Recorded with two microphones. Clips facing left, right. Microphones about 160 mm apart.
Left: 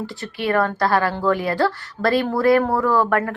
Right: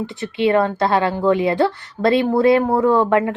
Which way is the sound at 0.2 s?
20° right (ahead or behind).